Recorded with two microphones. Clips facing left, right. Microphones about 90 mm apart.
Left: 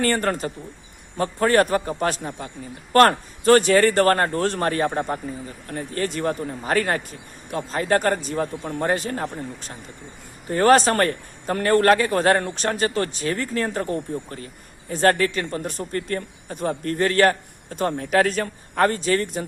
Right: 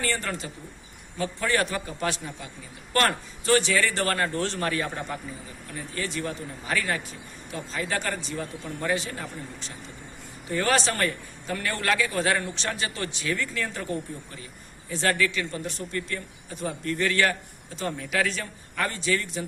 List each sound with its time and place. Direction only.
0.0 s a man's voice: 50° left (ahead or behind)